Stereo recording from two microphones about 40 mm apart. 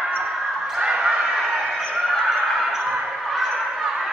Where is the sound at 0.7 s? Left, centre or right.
Right.